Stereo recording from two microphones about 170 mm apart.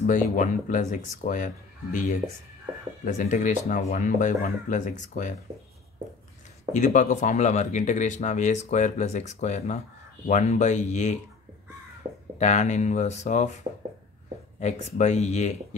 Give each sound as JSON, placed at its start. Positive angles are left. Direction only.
{"t": 0.0, "sound": "speech", "side_deg": 50}
{"t": 6.7, "sound": "speech", "side_deg": 45}
{"t": 12.4, "sound": "speech", "side_deg": 45}
{"t": 14.6, "sound": "speech", "side_deg": 40}